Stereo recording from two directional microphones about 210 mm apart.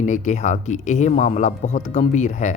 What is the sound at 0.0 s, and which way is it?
Speech, 35° left (ahead or behind).